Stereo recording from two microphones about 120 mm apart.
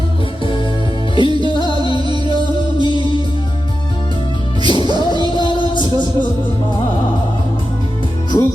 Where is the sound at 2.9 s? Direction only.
40° left (ahead or behind).